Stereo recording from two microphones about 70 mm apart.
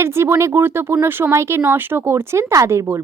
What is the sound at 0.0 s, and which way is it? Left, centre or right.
Speech, right.